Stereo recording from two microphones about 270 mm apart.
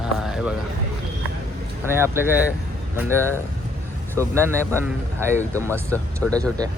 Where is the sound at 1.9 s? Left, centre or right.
Centre.